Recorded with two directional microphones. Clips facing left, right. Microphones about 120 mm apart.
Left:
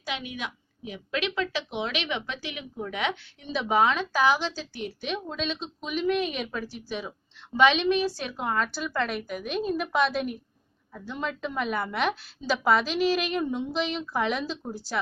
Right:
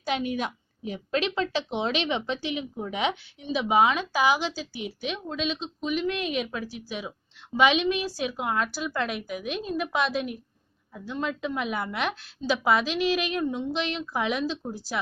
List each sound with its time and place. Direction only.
0.0 s a woman's voice: 40° right (ahead or behind); by 3.2 s 20° right (ahead or behind)
3.4 s a woman's voice: 10° right (ahead or behind)